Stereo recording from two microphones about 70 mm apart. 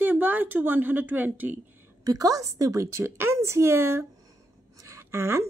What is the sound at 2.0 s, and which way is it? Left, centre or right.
A woman's voice, right.